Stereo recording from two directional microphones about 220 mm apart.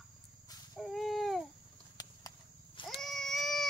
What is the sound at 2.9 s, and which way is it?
Child singing, centre (ahead or behind).